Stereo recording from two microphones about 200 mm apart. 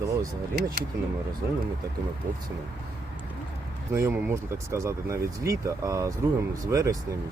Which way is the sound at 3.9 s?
10° right (ahead or behind).